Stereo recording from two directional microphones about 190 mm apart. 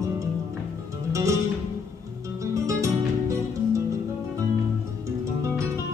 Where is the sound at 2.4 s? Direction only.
15° right (ahead or behind).